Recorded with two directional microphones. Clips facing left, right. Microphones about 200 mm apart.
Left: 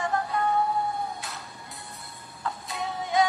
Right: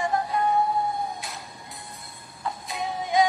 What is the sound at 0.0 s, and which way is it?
Music, 15° right (ahead or behind).